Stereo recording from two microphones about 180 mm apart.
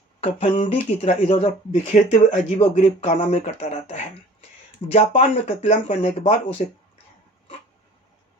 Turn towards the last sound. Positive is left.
turn(degrees=45)  # may be behind; listen again after turning